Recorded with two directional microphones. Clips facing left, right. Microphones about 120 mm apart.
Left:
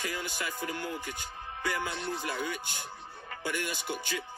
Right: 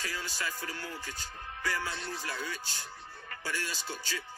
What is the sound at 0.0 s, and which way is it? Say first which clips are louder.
Speech: left 2 dB; 20° left (ahead or behind).